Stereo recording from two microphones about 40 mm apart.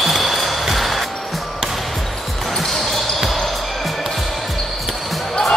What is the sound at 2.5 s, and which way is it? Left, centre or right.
Basketball bounce, centre.